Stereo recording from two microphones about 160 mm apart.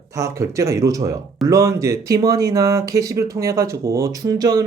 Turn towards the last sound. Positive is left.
turn(degrees=-25)  # may be behind; listen again after turning